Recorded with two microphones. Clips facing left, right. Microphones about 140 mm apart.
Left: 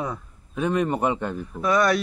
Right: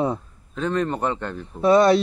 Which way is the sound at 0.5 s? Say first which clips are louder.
Left 1 dB; 10° left (ahead or behind).